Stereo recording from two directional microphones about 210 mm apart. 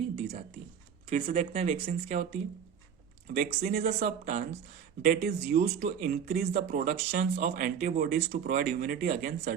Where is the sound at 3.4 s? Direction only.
45° right (ahead or behind).